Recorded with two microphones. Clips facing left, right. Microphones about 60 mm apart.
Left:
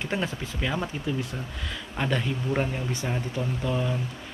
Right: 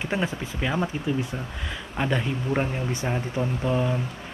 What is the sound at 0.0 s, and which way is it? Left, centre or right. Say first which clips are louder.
Speech: right 2 dB; centre.